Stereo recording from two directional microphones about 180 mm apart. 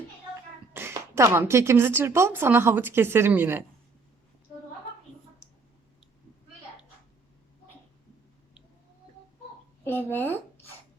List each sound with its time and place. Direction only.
0.7 s a woman's voice: 15° right (ahead or behind)
9.8 s speech: 10° left (ahead or behind)